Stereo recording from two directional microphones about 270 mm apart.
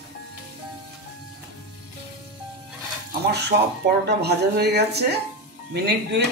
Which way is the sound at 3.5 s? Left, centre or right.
Right.